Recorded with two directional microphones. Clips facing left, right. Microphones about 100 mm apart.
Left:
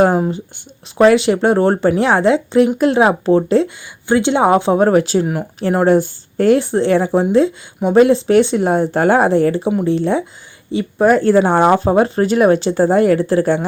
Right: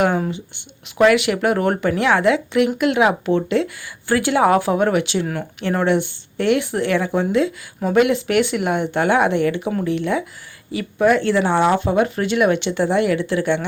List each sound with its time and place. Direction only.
0.0 s speech: 35° left (ahead or behind)
4.0 s speech: 25° left (ahead or behind); by 5.2 s 40° left (ahead or behind)
5.2 s speech: 20° left (ahead or behind)
5.5 s speech: 35° left (ahead or behind)